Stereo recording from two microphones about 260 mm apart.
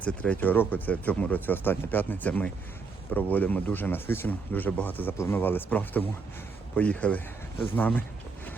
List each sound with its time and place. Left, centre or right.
0.0 s speech: centre